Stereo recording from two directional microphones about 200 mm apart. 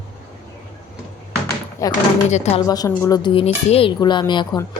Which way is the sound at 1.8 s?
15° left (ahead or behind).